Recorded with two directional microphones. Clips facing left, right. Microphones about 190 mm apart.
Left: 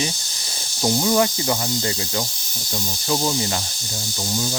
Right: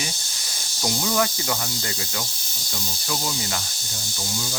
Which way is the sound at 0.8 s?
25° left (ahead or behind).